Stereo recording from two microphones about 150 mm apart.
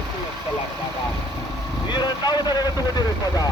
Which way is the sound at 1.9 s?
30° left (ahead or behind).